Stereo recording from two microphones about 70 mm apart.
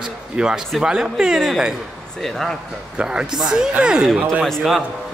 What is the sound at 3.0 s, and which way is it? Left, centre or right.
Speech, centre.